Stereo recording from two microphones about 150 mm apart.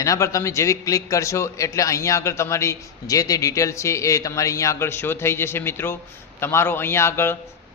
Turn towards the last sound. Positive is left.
turn(degrees=15)  # may be behind; listen again after turning